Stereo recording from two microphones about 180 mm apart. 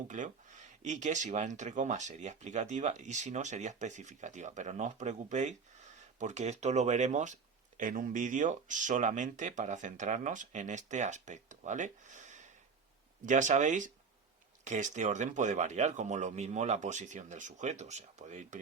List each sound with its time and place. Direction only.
0.1 s speech: 40° right (ahead or behind)